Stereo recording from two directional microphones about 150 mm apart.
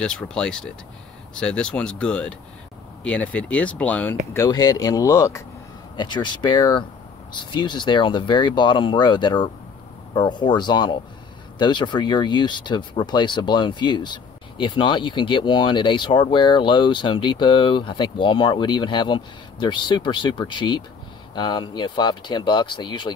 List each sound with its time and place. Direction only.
0.0 s speech: 5° left (ahead or behind)
4.3 s speech: 20° left (ahead or behind)
5.9 s speech: 30° left (ahead or behind)